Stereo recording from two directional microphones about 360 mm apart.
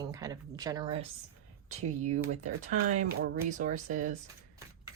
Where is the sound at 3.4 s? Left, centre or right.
Centre.